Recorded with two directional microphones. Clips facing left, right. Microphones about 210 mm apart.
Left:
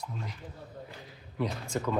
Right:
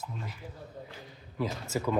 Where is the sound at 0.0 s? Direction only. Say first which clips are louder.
Left 1 dB; 5° right (ahead or behind).